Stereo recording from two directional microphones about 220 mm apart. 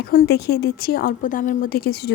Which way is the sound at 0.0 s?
45° left (ahead or behind).